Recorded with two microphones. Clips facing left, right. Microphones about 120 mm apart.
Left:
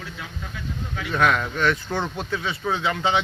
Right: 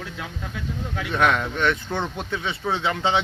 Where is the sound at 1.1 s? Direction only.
20° right (ahead or behind).